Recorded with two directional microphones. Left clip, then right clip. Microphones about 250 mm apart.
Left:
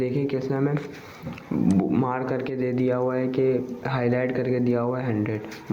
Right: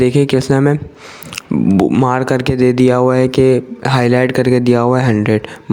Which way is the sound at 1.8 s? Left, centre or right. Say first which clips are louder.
Right 12 dB; right.